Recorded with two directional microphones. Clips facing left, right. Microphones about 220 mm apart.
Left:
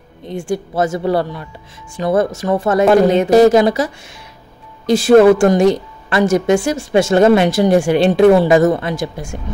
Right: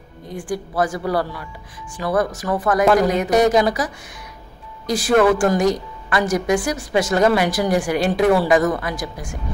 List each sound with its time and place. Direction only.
0.3 s a woman's voice: 25° left (ahead or behind)